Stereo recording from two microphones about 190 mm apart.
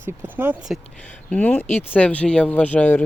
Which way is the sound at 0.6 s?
Centre (ahead or behind).